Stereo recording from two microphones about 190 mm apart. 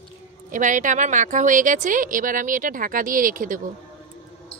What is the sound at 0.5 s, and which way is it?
Speech, 40° right (ahead or behind).